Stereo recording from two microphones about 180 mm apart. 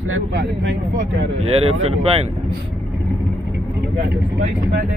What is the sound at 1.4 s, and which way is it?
Speech, 35° right (ahead or behind).